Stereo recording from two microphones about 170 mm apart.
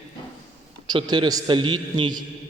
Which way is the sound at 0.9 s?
25° right (ahead or behind).